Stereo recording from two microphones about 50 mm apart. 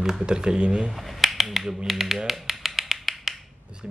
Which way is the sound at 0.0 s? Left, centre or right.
Centre.